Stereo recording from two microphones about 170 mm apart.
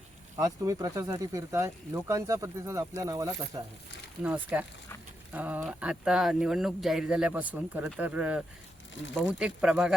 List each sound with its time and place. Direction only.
0.3 s speech: 20° right (ahead or behind)
4.2 s speech: 10° right (ahead or behind)